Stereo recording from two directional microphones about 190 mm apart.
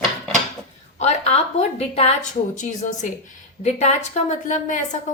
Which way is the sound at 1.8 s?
35° left (ahead or behind).